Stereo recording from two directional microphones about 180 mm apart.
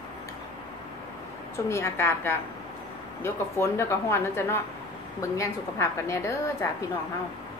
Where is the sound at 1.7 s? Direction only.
15° left (ahead or behind).